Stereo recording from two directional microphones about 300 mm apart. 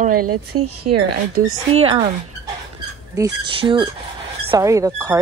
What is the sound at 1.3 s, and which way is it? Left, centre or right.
Speech, centre.